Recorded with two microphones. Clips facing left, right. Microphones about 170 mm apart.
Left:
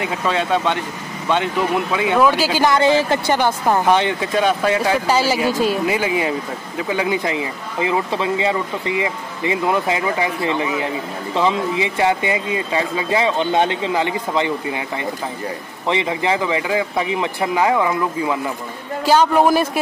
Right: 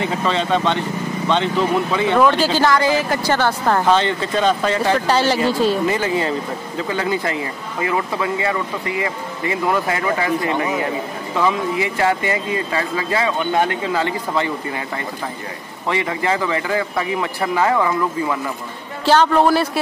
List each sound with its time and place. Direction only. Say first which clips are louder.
0.0 s speech: right 1 dB; 10° left (ahead or behind); by 3.3 s 25° left (ahead or behind)
3.3 s speech: left 1 dB; 15° left (ahead or behind)
15.9 s speech: left 1 dB; 20° left (ahead or behind)